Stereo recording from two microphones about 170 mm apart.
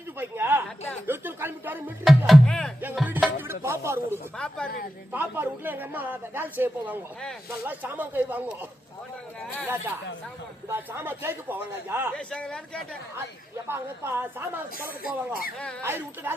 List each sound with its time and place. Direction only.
0.2 s a man's voice: 15° right (ahead or behind)
2.0 s music: centre (ahead or behind)
4.1 s a man's voice: 5° left (ahead or behind)
5.1 s a man's voice: 10° right (ahead or behind)
10.7 s a man's voice: 15° right (ahead or behind)
12.1 s a man's voice: 5° left (ahead or behind)
13.7 s a man's voice: 15° right (ahead or behind)
15.0 s speech: 60° left (ahead or behind)
15.8 s a man's voice: 10° right (ahead or behind)